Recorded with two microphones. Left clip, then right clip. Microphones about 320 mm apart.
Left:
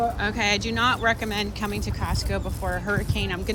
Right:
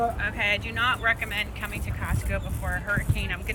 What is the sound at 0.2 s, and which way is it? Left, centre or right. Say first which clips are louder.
Speech: left 2 dB; centre.